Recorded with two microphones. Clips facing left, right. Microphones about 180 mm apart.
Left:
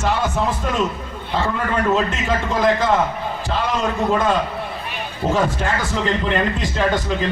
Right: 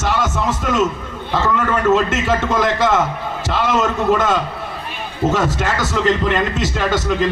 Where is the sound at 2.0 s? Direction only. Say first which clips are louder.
Right 4 dB; 85° right.